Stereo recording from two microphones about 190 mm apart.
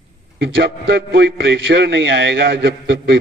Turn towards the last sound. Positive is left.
turn(degrees=-65)  # may be behind; listen again after turning